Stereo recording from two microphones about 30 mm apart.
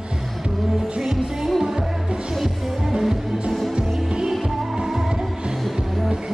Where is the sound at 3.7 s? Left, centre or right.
Right.